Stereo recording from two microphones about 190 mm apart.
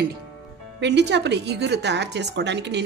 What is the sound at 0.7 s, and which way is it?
A woman's voice, 65° right (ahead or behind).